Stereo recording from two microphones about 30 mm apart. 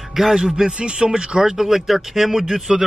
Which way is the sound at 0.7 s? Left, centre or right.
Right.